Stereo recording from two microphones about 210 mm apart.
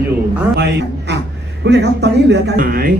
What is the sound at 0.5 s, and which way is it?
A man's voice, 50° right (ahead or behind).